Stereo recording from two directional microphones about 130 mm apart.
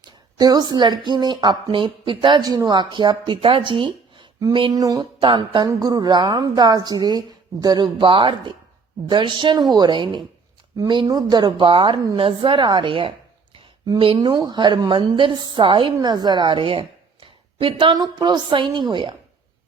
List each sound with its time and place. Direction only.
0.3 s a woman's voice: 30° right (ahead or behind)
4.7 s a woman's voice: 25° right (ahead or behind)